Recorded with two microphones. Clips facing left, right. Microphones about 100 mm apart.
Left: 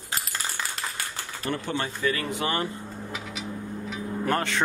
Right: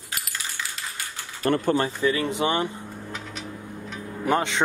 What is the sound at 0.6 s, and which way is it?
Typewriter, 45° left (ahead or behind).